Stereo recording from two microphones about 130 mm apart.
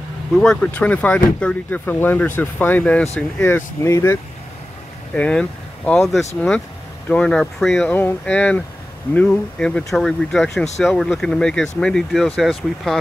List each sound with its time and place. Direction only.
0.4 s speech: 5° left (ahead or behind)
5.1 s speech: 10° left (ahead or behind)
7.1 s speech: 5° left (ahead or behind)
7.9 s speech: 15° left (ahead or behind)